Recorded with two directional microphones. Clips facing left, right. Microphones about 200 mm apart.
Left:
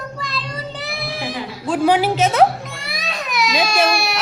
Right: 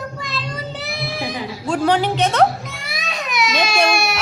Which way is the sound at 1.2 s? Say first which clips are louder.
Even; 20° right (ahead or behind).